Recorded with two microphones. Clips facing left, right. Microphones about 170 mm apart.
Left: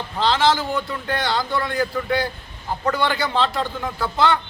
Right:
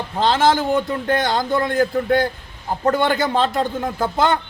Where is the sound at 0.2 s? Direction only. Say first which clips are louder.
Right 2 dB; 50° right (ahead or behind).